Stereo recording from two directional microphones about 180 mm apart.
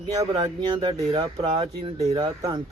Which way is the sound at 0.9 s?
25° right (ahead or behind).